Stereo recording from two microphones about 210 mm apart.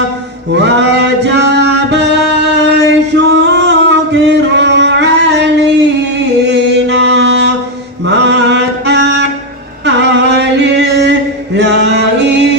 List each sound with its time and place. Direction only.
0.5 s music: 55° right (ahead or behind)
8.0 s mantra: 55° right (ahead or behind)
9.8 s a sound: 55° right (ahead or behind)
11.5 s music: 55° right (ahead or behind)